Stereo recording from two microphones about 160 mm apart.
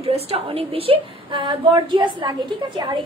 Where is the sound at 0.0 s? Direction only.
40° right (ahead or behind).